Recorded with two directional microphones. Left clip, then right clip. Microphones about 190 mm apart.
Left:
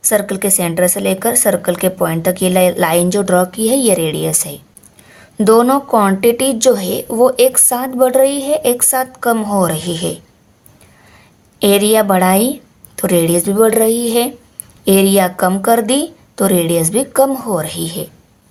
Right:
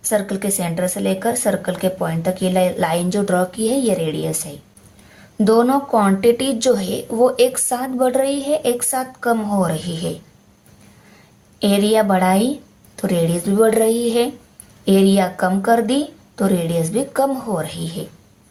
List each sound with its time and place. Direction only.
0.0 s a woman's voice: 40° left (ahead or behind)
11.6 s a woman's voice: 40° left (ahead or behind)